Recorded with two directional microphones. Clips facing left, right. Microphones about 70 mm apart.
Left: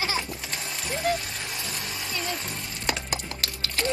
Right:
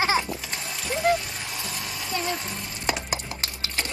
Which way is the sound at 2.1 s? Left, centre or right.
Right.